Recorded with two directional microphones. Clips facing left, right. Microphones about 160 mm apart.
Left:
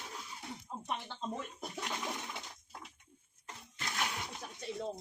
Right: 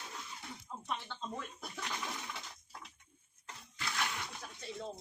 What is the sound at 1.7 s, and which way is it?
Toilet flush, 20° left (ahead or behind).